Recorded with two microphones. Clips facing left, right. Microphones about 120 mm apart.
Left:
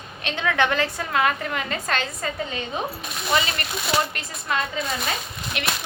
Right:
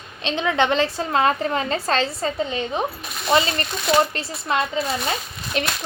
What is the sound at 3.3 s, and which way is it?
A child's voice, 30° right (ahead or behind).